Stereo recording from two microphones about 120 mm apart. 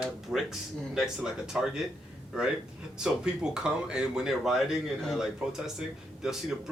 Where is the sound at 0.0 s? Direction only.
Centre (ahead or behind).